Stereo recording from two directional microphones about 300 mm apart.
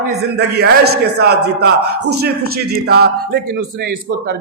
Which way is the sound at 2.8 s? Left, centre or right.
Right.